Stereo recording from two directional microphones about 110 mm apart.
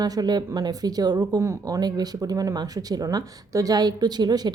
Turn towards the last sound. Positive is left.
turn(degrees=-40)  # may be behind; listen again after turning